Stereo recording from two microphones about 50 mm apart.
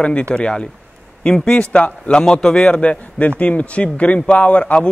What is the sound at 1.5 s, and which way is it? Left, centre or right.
Speech, left.